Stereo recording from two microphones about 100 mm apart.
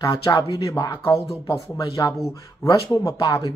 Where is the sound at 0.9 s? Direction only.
30° left (ahead or behind).